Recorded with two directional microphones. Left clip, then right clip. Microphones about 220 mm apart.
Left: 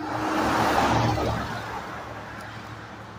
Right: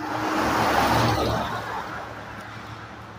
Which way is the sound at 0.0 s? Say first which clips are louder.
Right 1 dB; 30° right (ahead or behind).